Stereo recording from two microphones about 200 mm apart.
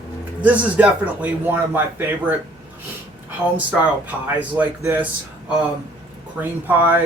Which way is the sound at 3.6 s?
10° right (ahead or behind).